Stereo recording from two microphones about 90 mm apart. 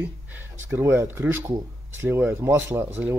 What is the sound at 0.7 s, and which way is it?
Speech, 30° right (ahead or behind).